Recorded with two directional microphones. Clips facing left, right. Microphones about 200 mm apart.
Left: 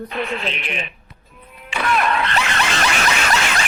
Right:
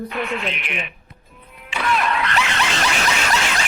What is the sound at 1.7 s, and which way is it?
Music, 50° left (ahead or behind).